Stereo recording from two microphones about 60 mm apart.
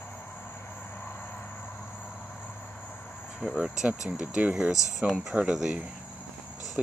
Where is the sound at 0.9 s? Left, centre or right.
Left.